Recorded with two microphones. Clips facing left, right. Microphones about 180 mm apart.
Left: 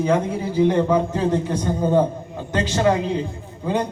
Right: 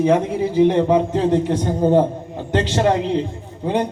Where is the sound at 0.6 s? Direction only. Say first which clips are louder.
Right 2 dB; 20° right (ahead or behind).